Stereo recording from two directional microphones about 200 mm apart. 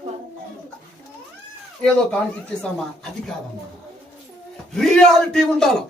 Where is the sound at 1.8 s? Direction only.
5° left (ahead or behind).